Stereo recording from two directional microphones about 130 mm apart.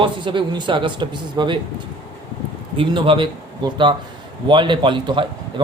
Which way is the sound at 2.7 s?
40° right (ahead or behind).